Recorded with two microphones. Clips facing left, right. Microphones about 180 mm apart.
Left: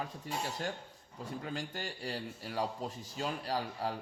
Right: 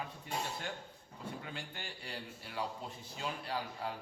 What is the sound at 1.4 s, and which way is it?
A man's voice, 40° left (ahead or behind).